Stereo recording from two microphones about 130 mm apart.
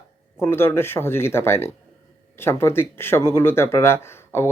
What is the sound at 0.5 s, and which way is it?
Speech, 20° left (ahead or behind).